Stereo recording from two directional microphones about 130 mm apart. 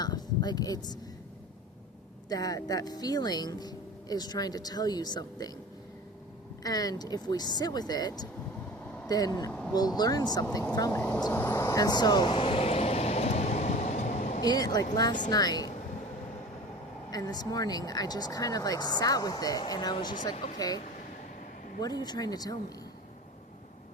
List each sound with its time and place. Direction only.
0.0 s a sound: 30° left (ahead or behind)
2.3 s speech: 30° left (ahead or behind)
6.6 s speech: 30° left (ahead or behind)
9.5 s a sound: 10° left (ahead or behind)
9.7 s speech: 30° left (ahead or behind)
11.3 s vehicle: 20° left (ahead or behind); by 14.4 s 65° left (ahead or behind)
14.4 s speech: 30° left (ahead or behind)
17.1 s speech: 30° left (ahead or behind)